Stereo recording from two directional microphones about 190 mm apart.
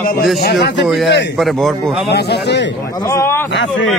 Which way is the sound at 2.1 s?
60° left (ahead or behind).